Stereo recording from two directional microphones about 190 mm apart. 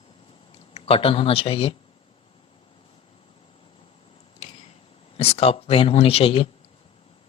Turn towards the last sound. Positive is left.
turn(degrees=30)  # may be behind; listen again after turning